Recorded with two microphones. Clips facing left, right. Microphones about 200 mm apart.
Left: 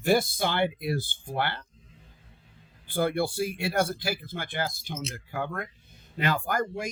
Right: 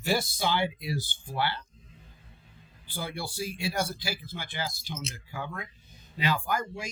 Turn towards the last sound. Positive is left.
turn(degrees=55)  # may be behind; listen again after turning